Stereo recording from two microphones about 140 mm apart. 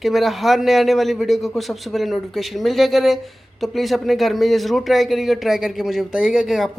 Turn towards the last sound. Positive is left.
turn(degrees=0)  # may be behind; listen again after turning